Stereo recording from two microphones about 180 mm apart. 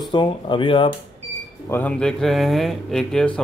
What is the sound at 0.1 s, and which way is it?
Speech, 25° left (ahead or behind).